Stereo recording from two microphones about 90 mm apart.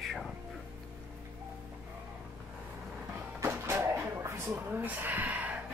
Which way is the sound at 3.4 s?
30° right (ahead or behind).